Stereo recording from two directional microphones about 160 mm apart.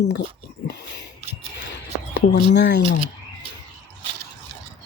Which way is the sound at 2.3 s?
90° left.